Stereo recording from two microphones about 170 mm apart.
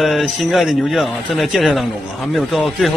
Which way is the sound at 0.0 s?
Centre (ahead or behind).